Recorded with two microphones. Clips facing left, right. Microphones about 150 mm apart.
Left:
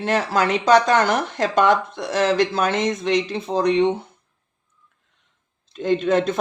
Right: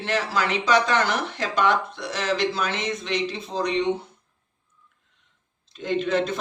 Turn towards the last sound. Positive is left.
turn(degrees=50)  # may be behind; listen again after turning